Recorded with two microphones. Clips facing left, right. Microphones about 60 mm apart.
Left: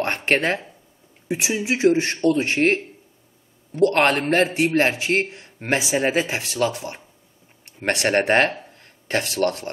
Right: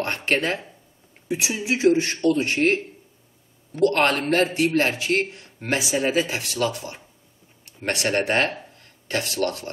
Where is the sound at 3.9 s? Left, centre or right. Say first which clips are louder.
Left 2 dB; left.